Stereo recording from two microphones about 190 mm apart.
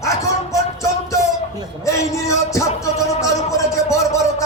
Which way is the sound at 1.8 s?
15° left (ahead or behind).